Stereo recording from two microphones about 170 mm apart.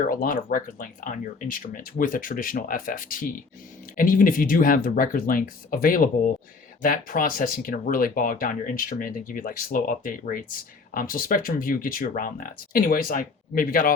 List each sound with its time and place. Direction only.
0.1 s speech: 55° left (ahead or behind)